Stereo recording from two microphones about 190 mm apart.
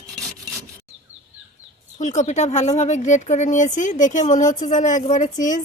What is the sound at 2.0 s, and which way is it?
Speech, 40° left (ahead or behind).